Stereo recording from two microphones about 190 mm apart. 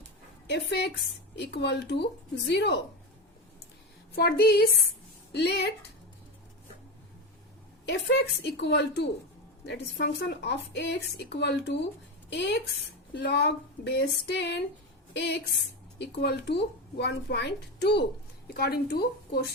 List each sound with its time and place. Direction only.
0.4 s speech: 60° left (ahead or behind)
4.1 s speech: 55° left (ahead or behind)
7.9 s a woman's voice: 65° left (ahead or behind)